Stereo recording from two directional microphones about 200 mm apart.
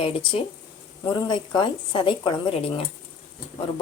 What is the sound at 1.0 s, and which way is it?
Speech, 20° left (ahead or behind).